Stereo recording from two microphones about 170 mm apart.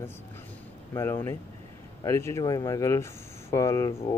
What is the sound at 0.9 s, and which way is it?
Speech, 15° left (ahead or behind).